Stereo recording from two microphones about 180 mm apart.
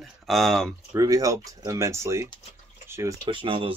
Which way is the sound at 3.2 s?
30° right (ahead or behind).